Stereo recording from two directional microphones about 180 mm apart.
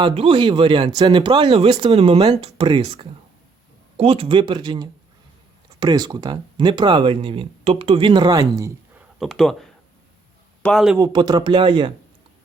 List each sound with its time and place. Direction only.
0.0 s speech: 30° right (ahead or behind)
8.5 s a sound: 15° right (ahead or behind)
9.1 s speech: centre (ahead or behind)
10.9 s speech: 20° right (ahead or behind)